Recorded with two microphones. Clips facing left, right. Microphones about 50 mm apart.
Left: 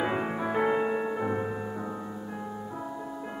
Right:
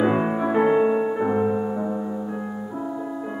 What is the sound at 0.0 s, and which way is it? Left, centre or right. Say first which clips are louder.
Music: right 8 dB; centre.